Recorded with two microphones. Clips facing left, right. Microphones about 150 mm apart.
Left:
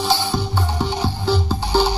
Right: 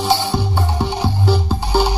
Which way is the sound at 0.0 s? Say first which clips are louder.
Right 3 dB; 20° right (ahead or behind).